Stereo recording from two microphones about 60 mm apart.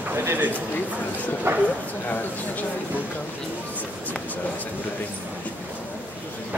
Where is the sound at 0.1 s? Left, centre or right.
Right.